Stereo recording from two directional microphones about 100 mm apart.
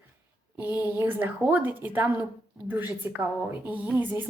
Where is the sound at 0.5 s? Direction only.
20° right (ahead or behind).